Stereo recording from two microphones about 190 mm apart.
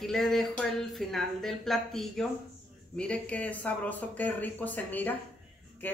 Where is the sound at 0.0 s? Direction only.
Centre (ahead or behind).